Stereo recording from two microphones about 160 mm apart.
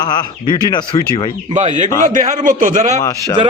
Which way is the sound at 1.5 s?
50° right (ahead or behind).